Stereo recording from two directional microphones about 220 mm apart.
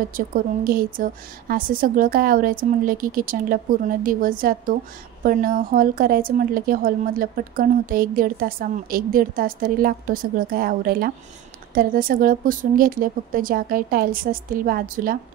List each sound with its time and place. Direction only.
0.1 s speech: 40° right (ahead or behind)